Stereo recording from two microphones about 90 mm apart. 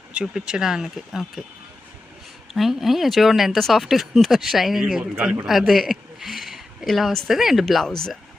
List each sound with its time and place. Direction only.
0.1 s speech: 10° right (ahead or behind)
2.5 s speech: centre (ahead or behind)
5.1 s speech: 15° right (ahead or behind)
5.5 s speech: centre (ahead or behind)